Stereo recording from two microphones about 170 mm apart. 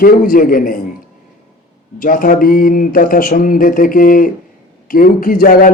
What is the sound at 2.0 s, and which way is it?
A man's voice, 55° left (ahead or behind).